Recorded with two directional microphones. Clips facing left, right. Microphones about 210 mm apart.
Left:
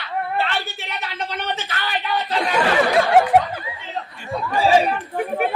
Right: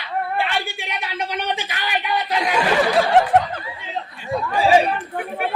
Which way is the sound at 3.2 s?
10° left (ahead or behind).